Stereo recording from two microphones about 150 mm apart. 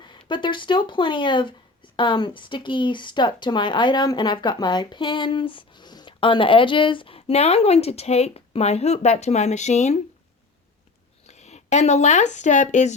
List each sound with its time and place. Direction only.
0.0 s speech: 30° left (ahead or behind); by 10.0 s 50° left (ahead or behind)
11.3 s speech: 50° left (ahead or behind)